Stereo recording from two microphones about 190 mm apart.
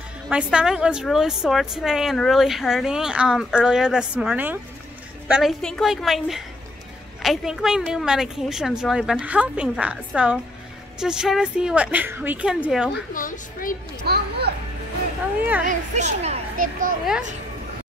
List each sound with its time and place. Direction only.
0.3 s a woman's voice: 5° right (ahead or behind)
13.1 s a woman's voice: 45° left (ahead or behind)
14.0 s a child's voice: 55° right (ahead or behind)
15.6 s a child's voice: 40° right (ahead or behind)